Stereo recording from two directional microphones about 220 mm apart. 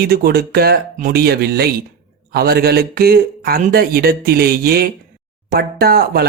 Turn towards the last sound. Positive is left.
turn(degrees=-45)  # may be behind; listen again after turning